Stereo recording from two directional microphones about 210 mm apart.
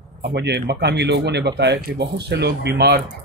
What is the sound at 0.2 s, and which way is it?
Speech, 55° right (ahead or behind).